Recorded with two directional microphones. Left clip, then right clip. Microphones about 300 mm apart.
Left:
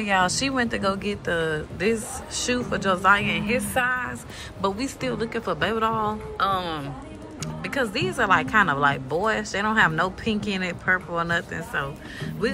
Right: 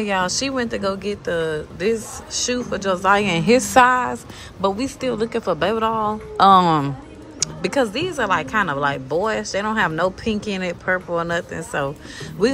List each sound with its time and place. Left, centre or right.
0.0 s speech: centre
6.3 s a woman's voice: centre